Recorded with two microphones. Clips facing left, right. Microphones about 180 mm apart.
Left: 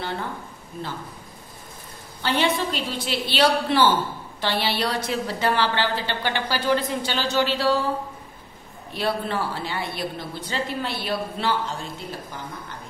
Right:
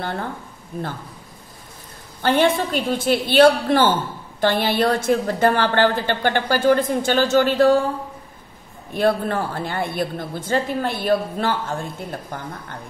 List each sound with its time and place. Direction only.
0.0 s a woman's voice: 50° right (ahead or behind)
2.2 s a woman's voice: 50° right (ahead or behind)
8.9 s a woman's voice: 50° right (ahead or behind)